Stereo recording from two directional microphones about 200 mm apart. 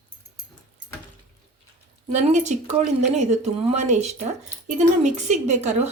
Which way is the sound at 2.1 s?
35° right (ahead or behind).